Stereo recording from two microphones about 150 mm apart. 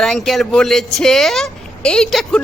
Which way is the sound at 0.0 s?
Centre (ahead or behind).